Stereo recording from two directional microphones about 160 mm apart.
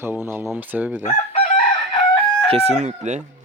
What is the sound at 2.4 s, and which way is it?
Speech, 40° right (ahead or behind).